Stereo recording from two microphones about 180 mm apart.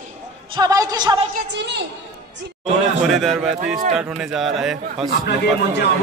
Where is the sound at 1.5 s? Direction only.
75° right (ahead or behind).